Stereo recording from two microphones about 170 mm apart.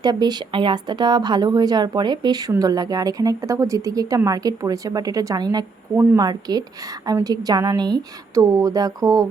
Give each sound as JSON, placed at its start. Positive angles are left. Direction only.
{"t": 0.0, "sound": "a woman's voice", "side_deg": -25}